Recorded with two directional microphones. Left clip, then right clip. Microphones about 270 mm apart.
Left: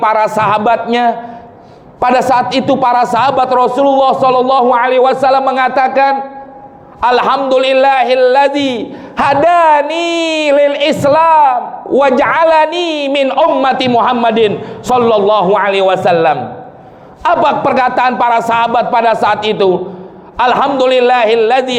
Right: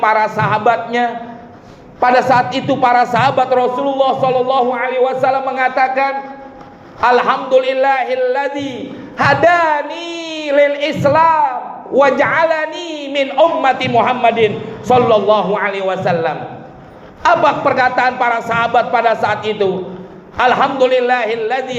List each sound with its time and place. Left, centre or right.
0.0 s a man's voice: left